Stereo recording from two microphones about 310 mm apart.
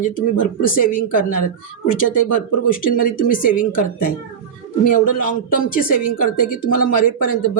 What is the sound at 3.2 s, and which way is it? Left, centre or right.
Speech, left.